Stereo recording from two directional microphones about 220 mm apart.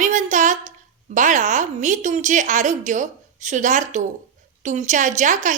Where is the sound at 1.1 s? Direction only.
35° right (ahead or behind).